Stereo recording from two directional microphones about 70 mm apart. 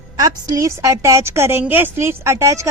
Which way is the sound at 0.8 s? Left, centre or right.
Right.